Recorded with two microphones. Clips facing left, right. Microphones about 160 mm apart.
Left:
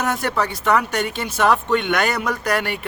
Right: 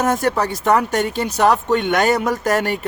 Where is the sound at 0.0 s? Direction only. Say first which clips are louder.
Right 4 dB; 40° right (ahead or behind).